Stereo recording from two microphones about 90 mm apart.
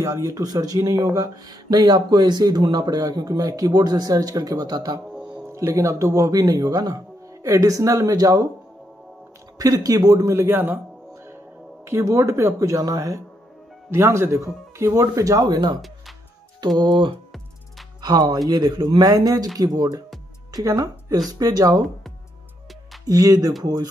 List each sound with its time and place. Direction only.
0.0 s speech: 40° right (ahead or behind)
5.1 s music: 10° right (ahead or behind)
5.5 s speech: 30° right (ahead or behind)
9.6 s speech: 40° right (ahead or behind); by 10.8 s 20° right (ahead or behind)
11.8 s speech: 35° right (ahead or behind)
16.6 s speech: 50° right (ahead or behind)
18.0 s speech: 50° right (ahead or behind)
23.0 s speech: 40° right (ahead or behind)